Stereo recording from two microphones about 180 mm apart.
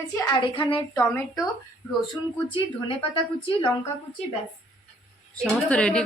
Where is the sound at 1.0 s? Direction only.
15° left (ahead or behind).